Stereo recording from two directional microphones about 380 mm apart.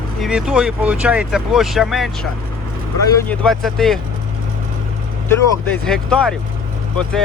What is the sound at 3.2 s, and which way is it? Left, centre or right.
Speech, centre.